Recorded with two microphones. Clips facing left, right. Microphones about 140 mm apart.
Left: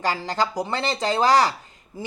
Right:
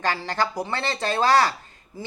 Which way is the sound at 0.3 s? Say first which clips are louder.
Left 1 dB; 15° left (ahead or behind).